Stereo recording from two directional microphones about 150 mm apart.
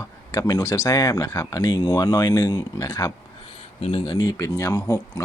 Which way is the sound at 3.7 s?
45° left (ahead or behind).